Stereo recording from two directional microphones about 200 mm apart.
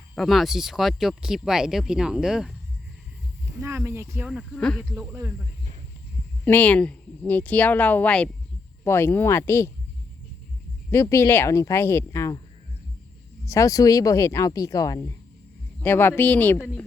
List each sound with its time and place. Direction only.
0.2 s speech: centre (ahead or behind)
3.6 s speech: 15° right (ahead or behind)
4.3 s speech: centre (ahead or behind)
6.4 s speech: 10° left (ahead or behind)
10.9 s speech: 15° left (ahead or behind)
13.4 s speech: 15° left (ahead or behind)